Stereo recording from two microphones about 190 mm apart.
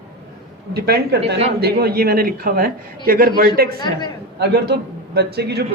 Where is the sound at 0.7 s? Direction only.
55° right (ahead or behind).